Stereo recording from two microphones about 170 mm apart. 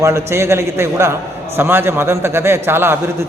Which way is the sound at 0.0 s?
15° right (ahead or behind).